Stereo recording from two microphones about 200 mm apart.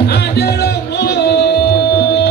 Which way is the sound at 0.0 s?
55° left (ahead or behind).